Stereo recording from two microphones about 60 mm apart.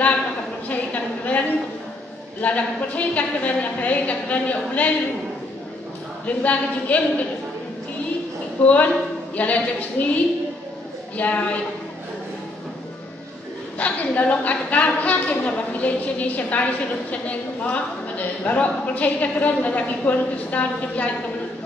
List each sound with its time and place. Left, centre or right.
0.7 s a sound: left
2.4 s a woman's voice: left
6.2 s a woman's voice: left
8.6 s a woman's voice: left
13.7 s a woman's voice: left